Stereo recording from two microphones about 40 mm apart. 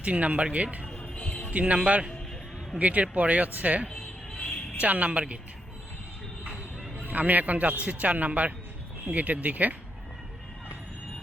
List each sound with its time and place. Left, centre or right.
0.0 s a man's voice: right
1.1 s music: left
1.5 s a man's voice: right
4.4 s music: left
4.8 s a man's voice: right
7.0 s a man's voice: right